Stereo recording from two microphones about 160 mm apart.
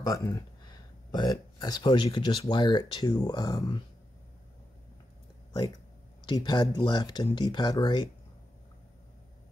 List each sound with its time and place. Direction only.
0.0 s speech: 20° left (ahead or behind)
6.2 s speech: 25° left (ahead or behind)